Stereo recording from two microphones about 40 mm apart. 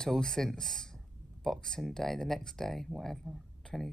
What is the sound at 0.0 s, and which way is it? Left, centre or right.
Speech, centre.